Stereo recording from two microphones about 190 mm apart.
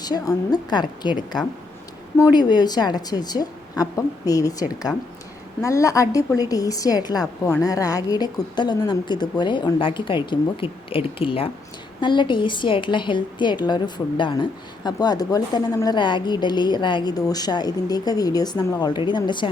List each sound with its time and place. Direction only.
0.0 s a woman's voice: 20° left (ahead or behind)